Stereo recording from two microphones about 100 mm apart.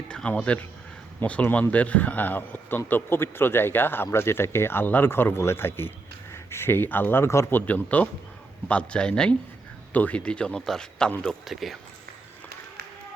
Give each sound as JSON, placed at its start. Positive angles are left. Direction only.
{"t": 0.1, "sound": "a man's voice", "side_deg": 10}
{"t": 7.7, "sound": "a man's voice", "side_deg": 15}